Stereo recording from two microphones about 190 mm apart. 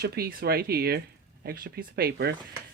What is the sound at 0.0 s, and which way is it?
Speech, 50° right (ahead or behind).